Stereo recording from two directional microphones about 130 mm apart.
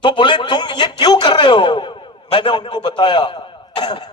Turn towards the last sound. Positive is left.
turn(degrees=35)  # may be behind; listen again after turning